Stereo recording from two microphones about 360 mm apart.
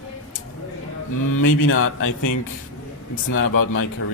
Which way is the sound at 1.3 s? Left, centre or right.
Left.